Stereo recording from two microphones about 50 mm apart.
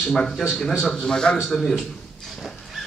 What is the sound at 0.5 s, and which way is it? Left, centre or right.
Speech, centre.